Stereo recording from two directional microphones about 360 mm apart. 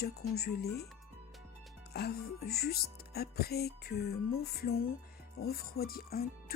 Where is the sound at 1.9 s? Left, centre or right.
Left.